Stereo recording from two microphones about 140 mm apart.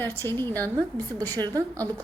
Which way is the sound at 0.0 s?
15° left (ahead or behind).